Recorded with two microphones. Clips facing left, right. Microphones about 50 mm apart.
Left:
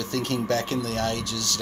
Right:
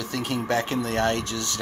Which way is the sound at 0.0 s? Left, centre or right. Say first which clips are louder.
Left 1 dB; centre.